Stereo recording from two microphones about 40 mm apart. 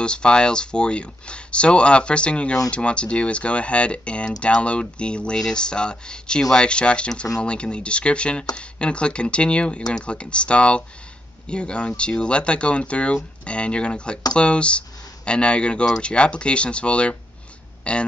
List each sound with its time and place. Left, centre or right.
0.0 s speech: left